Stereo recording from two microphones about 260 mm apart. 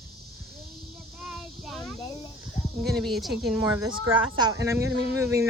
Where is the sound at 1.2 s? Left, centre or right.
Centre.